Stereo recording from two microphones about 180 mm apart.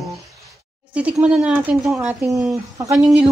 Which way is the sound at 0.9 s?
5° right (ahead or behind).